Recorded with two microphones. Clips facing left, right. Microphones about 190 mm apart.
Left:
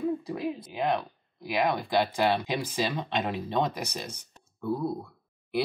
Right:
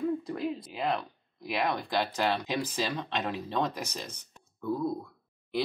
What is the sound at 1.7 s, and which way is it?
Speech, 15° left (ahead or behind).